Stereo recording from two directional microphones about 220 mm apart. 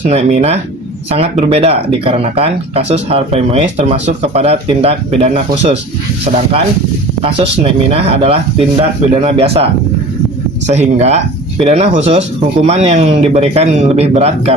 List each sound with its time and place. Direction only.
0.1 s speech: 30° right (ahead or behind)
7.2 s speech: 25° right (ahead or behind)
10.7 s speech: 30° right (ahead or behind)